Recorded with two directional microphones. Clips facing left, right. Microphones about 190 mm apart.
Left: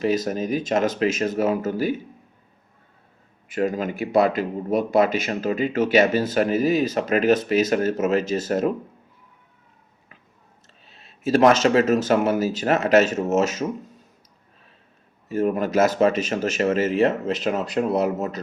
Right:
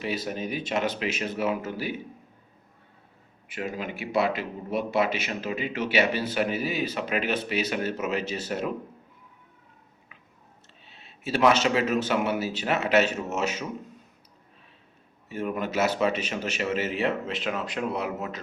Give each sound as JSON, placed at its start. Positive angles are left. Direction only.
{"t": 0.0, "sound": "a man's voice", "side_deg": 40}
{"t": 3.5, "sound": "a man's voice", "side_deg": 45}
{"t": 10.8, "sound": "a man's voice", "side_deg": 40}
{"t": 15.3, "sound": "a man's voice", "side_deg": 40}